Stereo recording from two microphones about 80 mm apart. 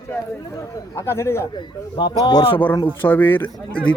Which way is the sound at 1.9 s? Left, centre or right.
Left.